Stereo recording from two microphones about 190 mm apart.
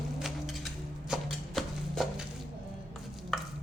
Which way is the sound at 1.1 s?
Centre (ahead or behind).